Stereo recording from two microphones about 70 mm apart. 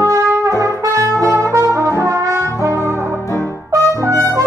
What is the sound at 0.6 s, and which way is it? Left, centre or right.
Brass instrument, right.